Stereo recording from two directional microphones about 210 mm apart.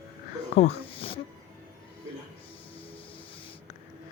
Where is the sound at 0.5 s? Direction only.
30° left (ahead or behind).